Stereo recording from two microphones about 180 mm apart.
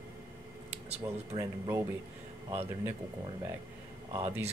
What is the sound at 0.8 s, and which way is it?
Speech, 35° right (ahead or behind).